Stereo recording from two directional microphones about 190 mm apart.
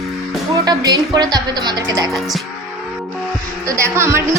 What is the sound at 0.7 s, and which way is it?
Speech, 20° right (ahead or behind).